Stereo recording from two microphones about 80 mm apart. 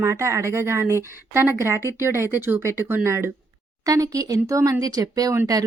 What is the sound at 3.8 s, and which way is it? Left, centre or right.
Speech, right.